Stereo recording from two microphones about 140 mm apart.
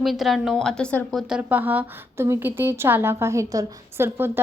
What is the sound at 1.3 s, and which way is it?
A woman's voice, 10° right (ahead or behind).